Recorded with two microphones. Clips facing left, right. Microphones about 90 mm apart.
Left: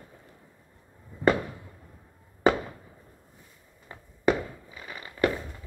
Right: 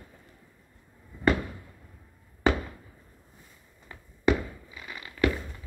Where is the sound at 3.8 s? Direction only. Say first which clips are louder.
Even; 35° left (ahead or behind).